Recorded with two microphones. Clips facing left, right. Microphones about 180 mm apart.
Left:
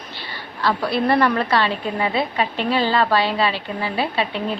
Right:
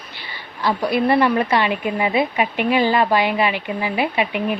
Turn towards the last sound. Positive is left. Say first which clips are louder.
# right 2 dB
turn(degrees=-15)  # may be behind; listen again after turning